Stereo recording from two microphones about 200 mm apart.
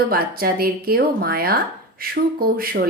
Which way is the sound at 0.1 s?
50° right (ahead or behind).